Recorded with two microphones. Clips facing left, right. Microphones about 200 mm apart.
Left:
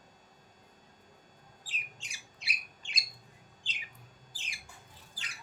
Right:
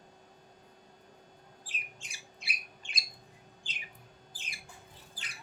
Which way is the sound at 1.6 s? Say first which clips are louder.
Even; 55° right (ahead or behind).